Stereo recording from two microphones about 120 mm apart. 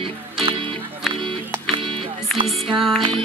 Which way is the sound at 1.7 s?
45° right (ahead or behind).